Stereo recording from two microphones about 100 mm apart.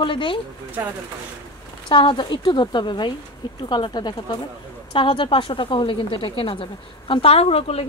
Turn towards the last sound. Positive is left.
turn(degrees=85)